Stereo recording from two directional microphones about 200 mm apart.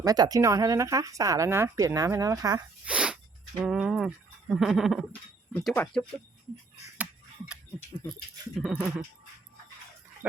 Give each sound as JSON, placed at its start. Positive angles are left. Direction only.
{"t": 0.0, "sound": "speech", "side_deg": -20}
{"t": 2.8, "sound": "sneeze", "side_deg": -5}
{"t": 3.6, "sound": "speech", "side_deg": 0}
{"t": 5.5, "sound": "speech", "side_deg": 10}
{"t": 7.0, "sound": "a sound", "side_deg": -5}
{"t": 8.5, "sound": "speech", "side_deg": -5}